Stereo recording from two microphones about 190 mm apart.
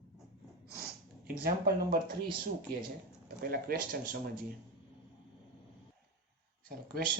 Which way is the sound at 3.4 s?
55° right (ahead or behind).